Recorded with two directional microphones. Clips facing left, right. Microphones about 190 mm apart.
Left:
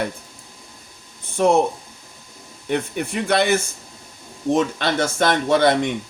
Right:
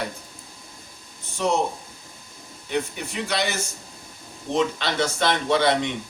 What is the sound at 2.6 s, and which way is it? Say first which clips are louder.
Speech: left 4 dB; 55° left (ahead or behind).